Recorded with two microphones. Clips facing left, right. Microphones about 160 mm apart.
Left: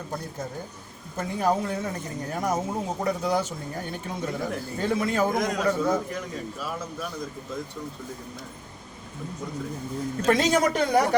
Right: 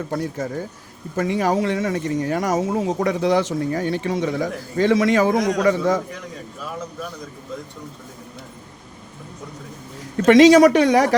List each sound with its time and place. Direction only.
0.1 s speech: 85° right
10.2 s speech: 90° right